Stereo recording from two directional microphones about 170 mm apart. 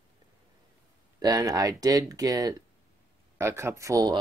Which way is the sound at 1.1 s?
20° right (ahead or behind).